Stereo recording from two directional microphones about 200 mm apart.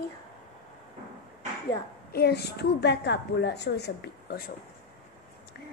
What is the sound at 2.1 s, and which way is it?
A woman's voice, 55° left (ahead or behind).